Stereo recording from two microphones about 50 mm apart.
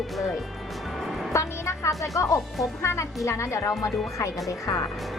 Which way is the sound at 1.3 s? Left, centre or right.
Left.